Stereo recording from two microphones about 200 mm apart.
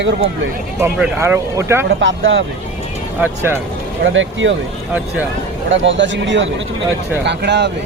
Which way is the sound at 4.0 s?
70° right (ahead or behind).